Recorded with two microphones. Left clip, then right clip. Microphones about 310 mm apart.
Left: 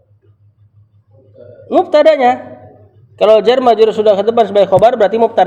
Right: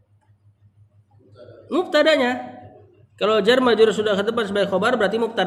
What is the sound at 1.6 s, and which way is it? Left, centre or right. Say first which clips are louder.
A man's voice: left 9 dB; centre.